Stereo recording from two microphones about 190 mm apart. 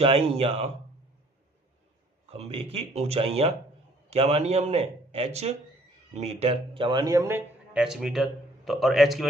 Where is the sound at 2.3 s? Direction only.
30° right (ahead or behind).